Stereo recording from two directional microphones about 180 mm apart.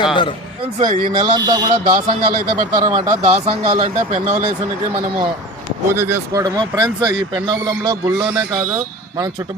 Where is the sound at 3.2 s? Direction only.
35° right (ahead or behind).